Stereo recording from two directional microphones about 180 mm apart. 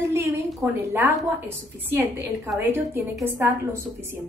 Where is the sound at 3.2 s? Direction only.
10° right (ahead or behind).